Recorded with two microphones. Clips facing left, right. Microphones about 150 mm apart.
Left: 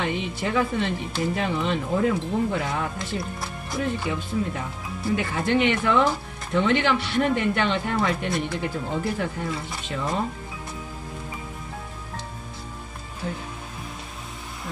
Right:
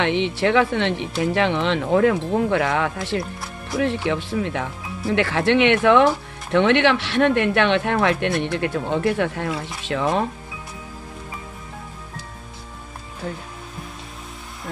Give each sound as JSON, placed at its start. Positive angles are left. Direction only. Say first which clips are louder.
{"t": 0.0, "sound": "speech", "louder": "right 7 dB", "side_deg": -80}